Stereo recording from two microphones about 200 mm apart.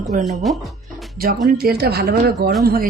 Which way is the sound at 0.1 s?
40° right (ahead or behind).